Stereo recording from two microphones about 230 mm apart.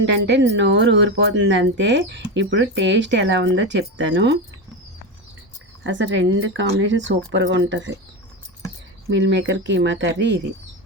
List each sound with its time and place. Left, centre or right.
0.0 s speech: right
5.8 s speech: right
9.0 s speech: right